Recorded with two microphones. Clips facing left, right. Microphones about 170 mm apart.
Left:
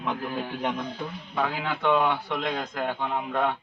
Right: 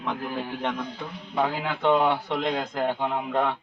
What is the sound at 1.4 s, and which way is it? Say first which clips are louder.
Speech: right 2 dB; 25° right (ahead or behind).